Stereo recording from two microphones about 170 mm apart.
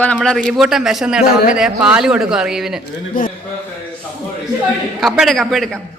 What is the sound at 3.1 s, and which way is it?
Speech, 55° left (ahead or behind).